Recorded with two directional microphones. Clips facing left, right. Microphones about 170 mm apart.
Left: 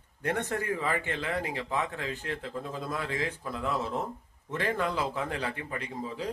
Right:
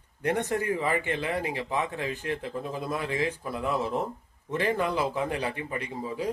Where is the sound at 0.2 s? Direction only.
15° right (ahead or behind).